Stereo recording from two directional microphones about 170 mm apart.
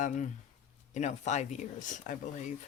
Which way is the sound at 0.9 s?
45° left (ahead or behind).